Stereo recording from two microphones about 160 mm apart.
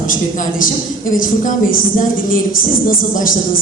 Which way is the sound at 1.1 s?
60° left (ahead or behind).